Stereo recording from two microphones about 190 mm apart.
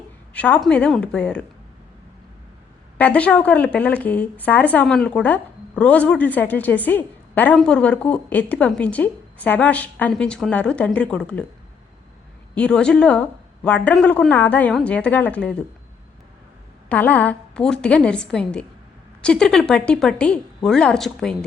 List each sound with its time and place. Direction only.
0.3 s a woman's voice: 10° left (ahead or behind)
3.0 s speech: 5° left (ahead or behind)
12.5 s speech: 5° left (ahead or behind)
16.9 s a woman's voice: 10° left (ahead or behind)